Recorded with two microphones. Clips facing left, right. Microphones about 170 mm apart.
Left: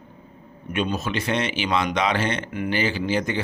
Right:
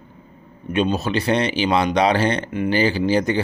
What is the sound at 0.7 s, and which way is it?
Speech, 30° right (ahead or behind).